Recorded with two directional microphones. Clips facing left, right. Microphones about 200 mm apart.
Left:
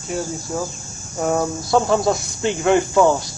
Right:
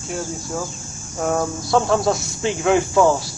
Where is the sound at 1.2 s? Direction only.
5° left (ahead or behind).